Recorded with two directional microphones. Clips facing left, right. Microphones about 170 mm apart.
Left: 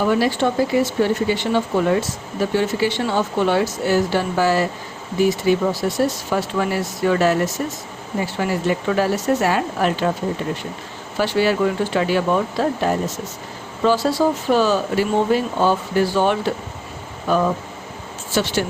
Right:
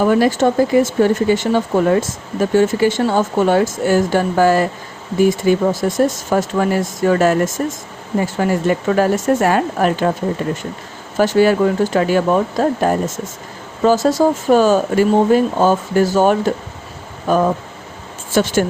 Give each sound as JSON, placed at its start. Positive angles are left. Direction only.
{"t": 0.0, "sound": "speech", "side_deg": -45}
{"t": 11.2, "sound": "speech", "side_deg": -45}